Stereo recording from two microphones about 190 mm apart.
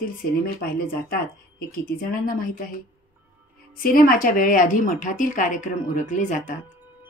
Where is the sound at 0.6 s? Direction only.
50° left (ahead or behind).